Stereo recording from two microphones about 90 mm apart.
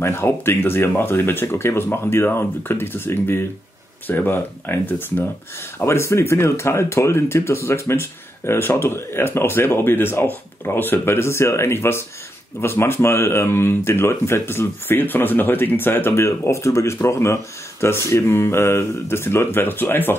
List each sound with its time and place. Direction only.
0.0 s speech: 30° left (ahead or behind)